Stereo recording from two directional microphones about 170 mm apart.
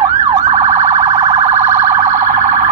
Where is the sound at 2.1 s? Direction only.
15° right (ahead or behind).